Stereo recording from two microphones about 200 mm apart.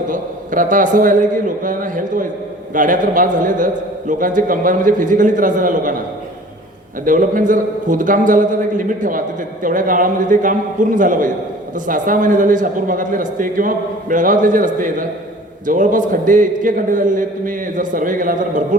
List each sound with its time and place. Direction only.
0.1 s a man's voice: 40° right (ahead or behind)
7.0 s a man's voice: 40° right (ahead or behind)